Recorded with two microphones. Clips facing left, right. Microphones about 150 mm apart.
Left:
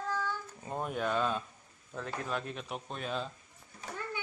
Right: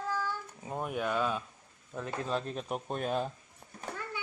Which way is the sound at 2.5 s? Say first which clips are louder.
Right 5 dB; 40° right (ahead or behind).